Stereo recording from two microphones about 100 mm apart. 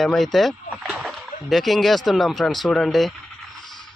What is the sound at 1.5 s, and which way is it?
Speech, centre (ahead or behind).